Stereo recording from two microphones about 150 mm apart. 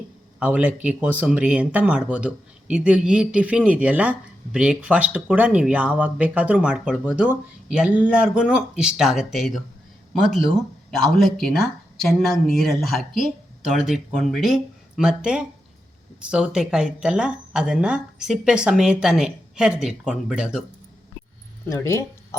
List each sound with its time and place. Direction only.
0.3 s speech: 10° right (ahead or behind)
21.7 s speech: 20° left (ahead or behind)